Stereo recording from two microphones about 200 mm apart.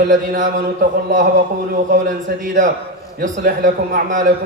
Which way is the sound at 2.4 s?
40° right (ahead or behind).